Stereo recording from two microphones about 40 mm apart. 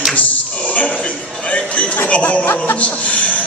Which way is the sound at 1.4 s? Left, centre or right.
Left.